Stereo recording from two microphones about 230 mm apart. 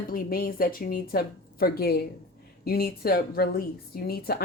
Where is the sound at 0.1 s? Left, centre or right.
Left.